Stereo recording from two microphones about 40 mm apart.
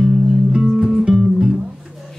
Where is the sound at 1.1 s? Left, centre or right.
Centre.